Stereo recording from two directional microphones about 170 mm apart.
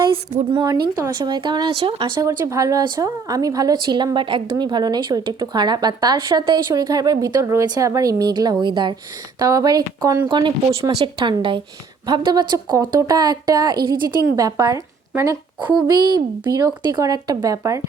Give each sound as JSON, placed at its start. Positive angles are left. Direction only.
{"t": 0.5, "sound": "speech", "side_deg": -25}
{"t": 13.7, "sound": "a woman's voice", "side_deg": -60}
{"t": 14.3, "sound": "a woman's voice", "side_deg": -20}